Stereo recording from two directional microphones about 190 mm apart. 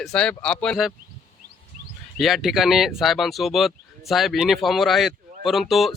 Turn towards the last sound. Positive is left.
turn(degrees=0)  # may be behind; listen again after turning